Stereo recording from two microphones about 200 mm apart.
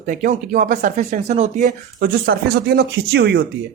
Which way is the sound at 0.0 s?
40° right (ahead or behind).